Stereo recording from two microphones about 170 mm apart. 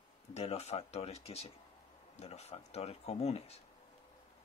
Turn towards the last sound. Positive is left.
turn(degrees=40)  # may be behind; listen again after turning